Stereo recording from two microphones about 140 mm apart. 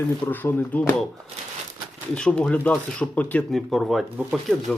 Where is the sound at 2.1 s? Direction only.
5° left (ahead or behind).